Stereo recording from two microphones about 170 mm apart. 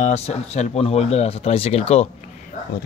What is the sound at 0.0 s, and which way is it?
Speech, 40° left (ahead or behind).